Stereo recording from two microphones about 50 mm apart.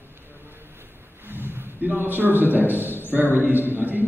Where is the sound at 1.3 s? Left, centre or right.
Right.